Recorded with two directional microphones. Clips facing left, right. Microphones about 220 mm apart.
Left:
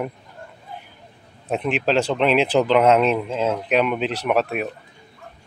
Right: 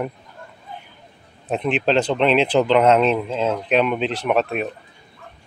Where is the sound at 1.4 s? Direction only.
5° left (ahead or behind).